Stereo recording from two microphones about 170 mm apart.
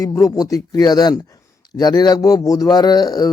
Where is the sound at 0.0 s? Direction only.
20° left (ahead or behind).